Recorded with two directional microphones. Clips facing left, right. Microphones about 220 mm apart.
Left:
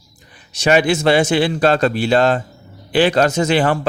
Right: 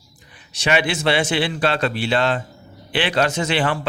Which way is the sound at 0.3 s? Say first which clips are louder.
Left 6 dB; 40° left (ahead or behind).